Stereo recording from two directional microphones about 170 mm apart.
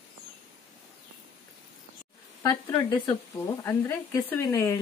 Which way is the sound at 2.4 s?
20° left (ahead or behind).